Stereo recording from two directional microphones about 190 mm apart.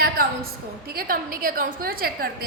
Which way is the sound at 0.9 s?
50° right (ahead or behind).